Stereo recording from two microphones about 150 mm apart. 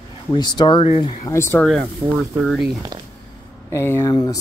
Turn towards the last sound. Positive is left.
turn(degrees=25)  # may be behind; listen again after turning